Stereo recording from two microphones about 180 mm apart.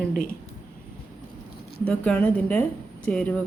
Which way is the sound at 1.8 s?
5° left (ahead or behind).